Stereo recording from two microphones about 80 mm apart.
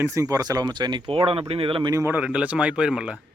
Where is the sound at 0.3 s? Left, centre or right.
Right.